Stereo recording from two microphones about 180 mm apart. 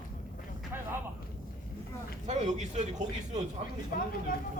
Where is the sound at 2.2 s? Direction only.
40° right (ahead or behind).